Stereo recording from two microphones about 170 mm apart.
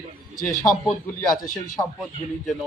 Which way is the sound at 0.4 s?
50° left (ahead or behind).